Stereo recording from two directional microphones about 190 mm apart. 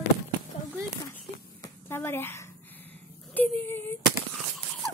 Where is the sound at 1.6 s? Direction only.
10° left (ahead or behind).